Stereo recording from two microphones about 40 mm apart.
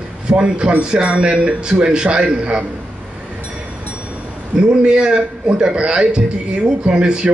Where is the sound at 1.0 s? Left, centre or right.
Right.